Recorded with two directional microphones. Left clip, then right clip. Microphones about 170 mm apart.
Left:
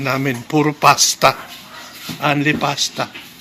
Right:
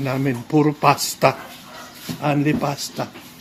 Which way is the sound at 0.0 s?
5° right (ahead or behind).